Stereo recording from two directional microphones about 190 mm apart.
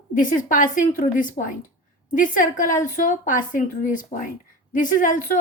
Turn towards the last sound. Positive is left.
turn(degrees=45)  # may be behind; listen again after turning